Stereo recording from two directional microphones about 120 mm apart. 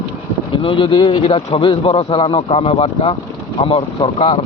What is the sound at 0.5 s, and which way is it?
A man's voice, 45° left (ahead or behind).